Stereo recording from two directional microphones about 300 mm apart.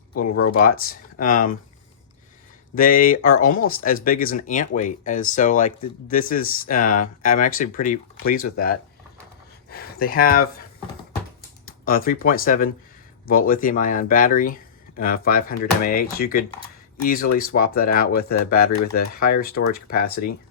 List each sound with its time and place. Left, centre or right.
0.4 s speech: left
2.7 s speech: left
11.6 s speech: left